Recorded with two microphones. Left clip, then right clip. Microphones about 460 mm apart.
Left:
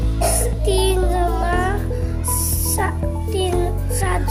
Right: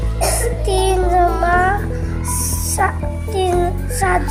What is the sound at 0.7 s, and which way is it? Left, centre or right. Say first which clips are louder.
Music: right 4 dB; left.